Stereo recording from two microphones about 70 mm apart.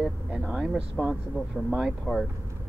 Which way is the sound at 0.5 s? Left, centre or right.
Centre.